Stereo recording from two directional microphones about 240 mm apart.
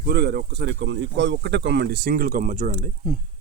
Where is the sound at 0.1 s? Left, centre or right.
Right.